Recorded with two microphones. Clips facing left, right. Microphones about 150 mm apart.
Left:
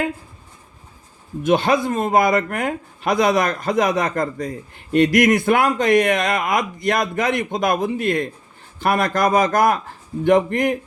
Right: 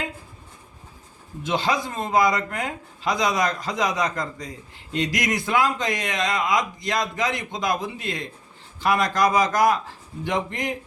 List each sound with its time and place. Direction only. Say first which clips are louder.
1.5 s a man's voice: left 7 dB; 55° left (ahead or behind)